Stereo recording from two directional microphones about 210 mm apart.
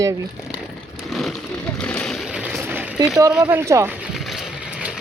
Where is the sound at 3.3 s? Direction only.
10° right (ahead or behind).